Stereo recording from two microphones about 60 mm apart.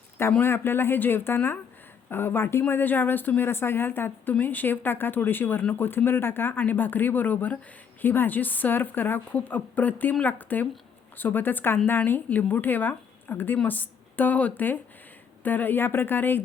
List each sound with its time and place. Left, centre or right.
0.4 s a woman's voice: left